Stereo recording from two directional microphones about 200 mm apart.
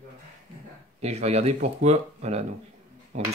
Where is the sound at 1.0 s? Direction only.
30° right (ahead or behind).